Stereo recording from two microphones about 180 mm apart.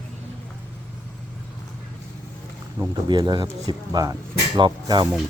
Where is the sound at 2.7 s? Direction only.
20° right (ahead or behind).